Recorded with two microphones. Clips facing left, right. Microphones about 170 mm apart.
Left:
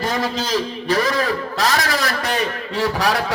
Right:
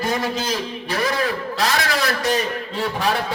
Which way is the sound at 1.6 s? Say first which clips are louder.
Left 1 dB; 50° left (ahead or behind).